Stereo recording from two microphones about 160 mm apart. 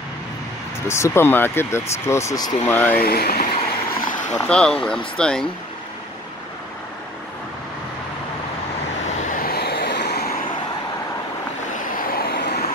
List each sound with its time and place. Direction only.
0.8 s speech: 15° left (ahead or behind)
3.0 s speech: 75° left (ahead or behind)
4.3 s speech: 5° left (ahead or behind)
9.3 s vehicle: 65° left (ahead or behind); by 10.3 s 85° left
12.1 s vehicle: 80° left